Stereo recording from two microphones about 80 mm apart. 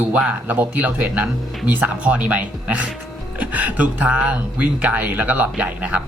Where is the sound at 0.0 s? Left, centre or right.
Centre.